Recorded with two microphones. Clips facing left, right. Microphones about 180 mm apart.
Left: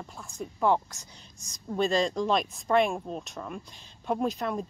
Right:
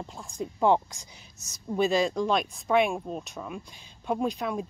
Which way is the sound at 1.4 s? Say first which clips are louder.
Right 2 dB; 5° right (ahead or behind).